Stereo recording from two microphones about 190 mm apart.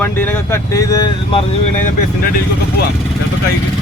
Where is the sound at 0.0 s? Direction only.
10° left (ahead or behind).